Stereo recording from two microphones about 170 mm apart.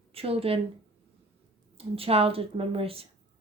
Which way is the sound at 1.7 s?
35° right (ahead or behind).